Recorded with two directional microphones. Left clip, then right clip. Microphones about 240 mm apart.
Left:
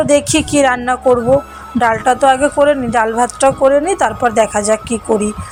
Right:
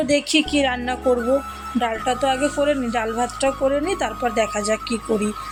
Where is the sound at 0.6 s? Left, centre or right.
Centre.